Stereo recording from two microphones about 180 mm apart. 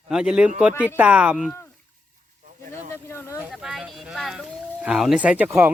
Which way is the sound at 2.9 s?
15° left (ahead or behind).